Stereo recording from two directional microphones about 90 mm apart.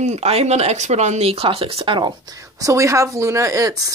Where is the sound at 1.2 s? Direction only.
90° right; by 2.1 s 70° right (ahead or behind).